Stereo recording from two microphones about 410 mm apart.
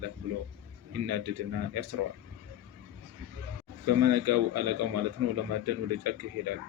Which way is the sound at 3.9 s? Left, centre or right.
Right.